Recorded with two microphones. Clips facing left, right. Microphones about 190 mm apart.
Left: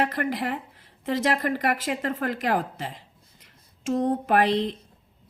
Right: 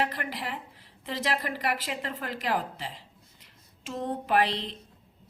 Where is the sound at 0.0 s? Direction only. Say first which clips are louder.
Left 6 dB; 45° left (ahead or behind).